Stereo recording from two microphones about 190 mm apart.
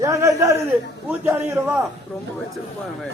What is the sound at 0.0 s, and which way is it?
A man's voice, 15° right (ahead or behind).